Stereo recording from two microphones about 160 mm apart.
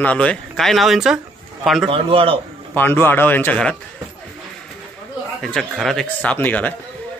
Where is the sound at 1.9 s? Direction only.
35° right (ahead or behind).